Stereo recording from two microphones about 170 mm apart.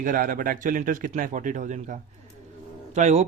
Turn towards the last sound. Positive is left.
turn(degrees=-45)  # may be behind; listen again after turning